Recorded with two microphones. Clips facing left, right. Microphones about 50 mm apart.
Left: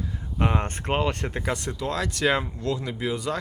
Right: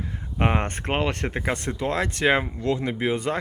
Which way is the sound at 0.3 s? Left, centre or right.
Right.